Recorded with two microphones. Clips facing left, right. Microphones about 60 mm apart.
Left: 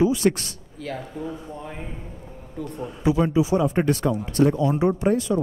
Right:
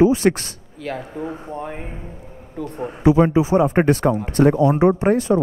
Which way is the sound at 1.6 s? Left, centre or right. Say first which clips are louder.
Right 5 dB; right.